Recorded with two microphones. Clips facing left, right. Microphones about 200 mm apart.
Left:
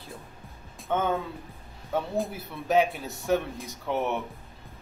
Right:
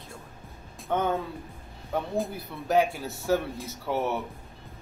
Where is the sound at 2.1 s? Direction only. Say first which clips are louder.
Even; centre (ahead or behind).